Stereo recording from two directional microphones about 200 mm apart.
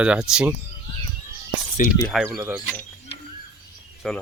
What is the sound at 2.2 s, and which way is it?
Speech, 10° right (ahead or behind).